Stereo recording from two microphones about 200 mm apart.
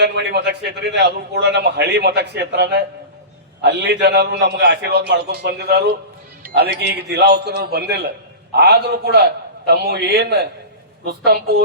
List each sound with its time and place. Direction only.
0.0 s a man's voice: 55° right (ahead or behind)